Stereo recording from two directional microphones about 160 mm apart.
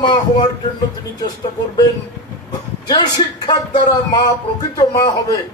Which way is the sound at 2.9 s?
25° left (ahead or behind).